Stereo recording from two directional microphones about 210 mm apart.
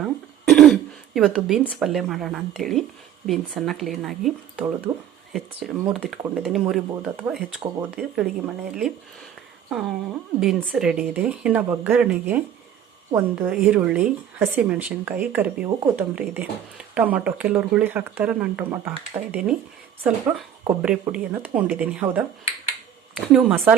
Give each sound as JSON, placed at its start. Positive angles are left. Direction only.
{"t": 0.0, "sound": "throat clearing", "side_deg": 0}
{"t": 1.6, "sound": "speech", "side_deg": 0}
{"t": 9.6, "sound": "a sound", "side_deg": 0}
{"t": 10.4, "sound": "speech", "side_deg": 0}